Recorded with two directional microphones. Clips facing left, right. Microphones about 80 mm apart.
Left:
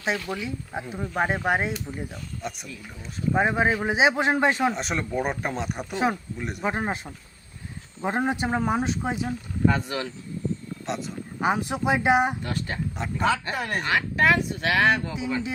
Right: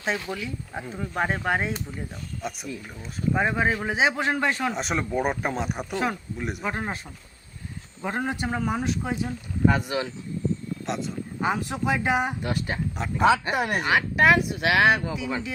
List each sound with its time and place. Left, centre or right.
0.3 s speech: centre
2.4 s speech: centre
3.3 s a man's voice: centre
4.7 s speech: centre
6.7 s a man's voice: centre
8.0 s a man's voice: left
9.6 s speech: centre
10.8 s speech: centre
11.3 s a man's voice: centre
12.4 s speech: centre